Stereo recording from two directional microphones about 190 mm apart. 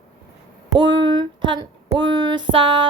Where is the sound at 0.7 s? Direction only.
25° right (ahead or behind).